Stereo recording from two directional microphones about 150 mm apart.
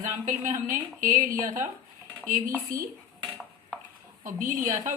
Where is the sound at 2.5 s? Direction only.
20° right (ahead or behind).